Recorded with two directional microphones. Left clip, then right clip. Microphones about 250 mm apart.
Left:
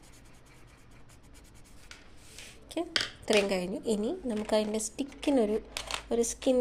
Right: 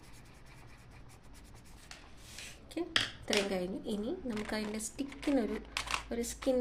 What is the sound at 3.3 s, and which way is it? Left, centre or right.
A woman's voice, left.